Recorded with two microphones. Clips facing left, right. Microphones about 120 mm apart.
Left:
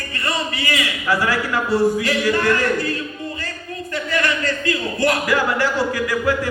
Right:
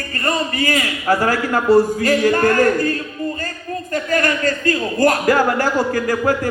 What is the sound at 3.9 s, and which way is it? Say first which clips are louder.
Speech: right 3 dB; 45° right (ahead or behind).